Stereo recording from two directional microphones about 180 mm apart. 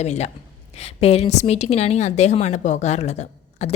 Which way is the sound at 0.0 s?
40° left (ahead or behind).